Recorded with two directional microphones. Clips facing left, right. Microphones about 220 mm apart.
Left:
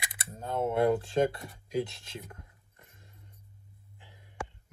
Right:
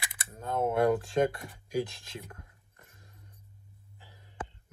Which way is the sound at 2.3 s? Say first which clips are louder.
Even; 25° left (ahead or behind).